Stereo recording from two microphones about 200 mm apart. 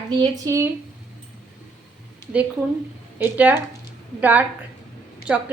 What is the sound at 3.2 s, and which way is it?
Speech, 10° right (ahead or behind).